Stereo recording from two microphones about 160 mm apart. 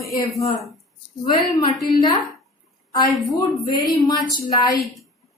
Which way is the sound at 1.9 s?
30° left (ahead or behind).